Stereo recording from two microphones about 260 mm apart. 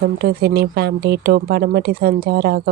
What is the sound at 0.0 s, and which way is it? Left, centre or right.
Speech, right.